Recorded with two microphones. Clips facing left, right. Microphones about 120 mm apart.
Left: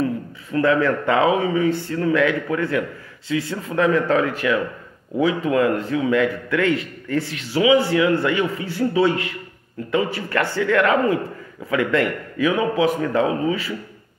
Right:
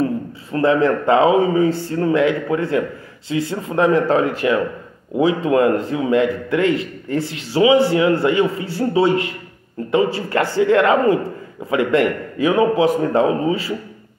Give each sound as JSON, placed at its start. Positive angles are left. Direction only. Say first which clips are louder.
{"t": 0.0, "sound": "a man's voice", "louder": "right 3 dB", "side_deg": -30}